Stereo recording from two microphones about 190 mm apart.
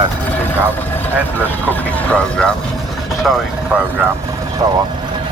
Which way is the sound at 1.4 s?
10° left (ahead or behind).